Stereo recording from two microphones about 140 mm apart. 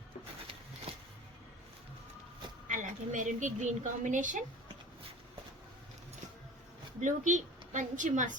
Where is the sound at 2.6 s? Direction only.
65° right (ahead or behind).